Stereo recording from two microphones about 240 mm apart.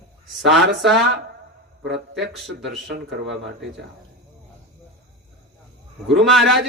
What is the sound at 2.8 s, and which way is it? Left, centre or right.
Speech, right.